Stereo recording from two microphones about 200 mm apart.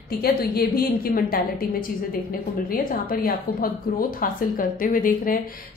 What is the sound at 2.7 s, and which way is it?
A woman's voice, 45° left (ahead or behind).